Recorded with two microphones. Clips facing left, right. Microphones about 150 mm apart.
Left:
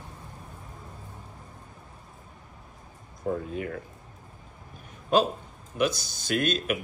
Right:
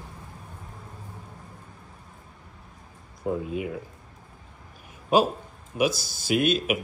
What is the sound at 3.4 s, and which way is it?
Speech, 5° right (ahead or behind).